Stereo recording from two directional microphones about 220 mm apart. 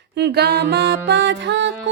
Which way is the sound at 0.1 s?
50° right (ahead or behind).